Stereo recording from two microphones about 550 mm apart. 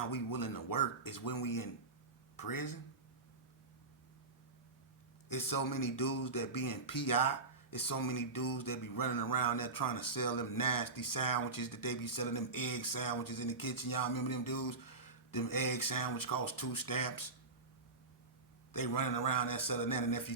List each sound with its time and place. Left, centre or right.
0.0 s speech: left
5.3 s speech: left
18.7 s speech: left